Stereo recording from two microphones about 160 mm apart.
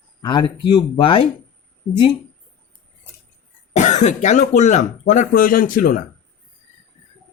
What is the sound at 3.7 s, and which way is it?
Speech, 50° left (ahead or behind).